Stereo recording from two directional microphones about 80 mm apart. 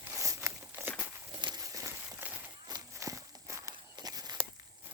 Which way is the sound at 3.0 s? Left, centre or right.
Right.